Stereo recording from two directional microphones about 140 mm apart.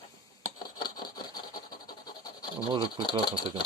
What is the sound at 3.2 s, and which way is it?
Speech, 30° left (ahead or behind).